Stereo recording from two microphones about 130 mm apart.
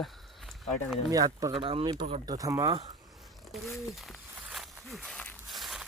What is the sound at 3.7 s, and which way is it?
Owl, centre (ahead or behind).